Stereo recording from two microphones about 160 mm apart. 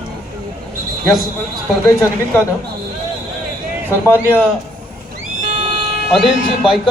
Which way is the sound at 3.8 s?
10° left (ahead or behind).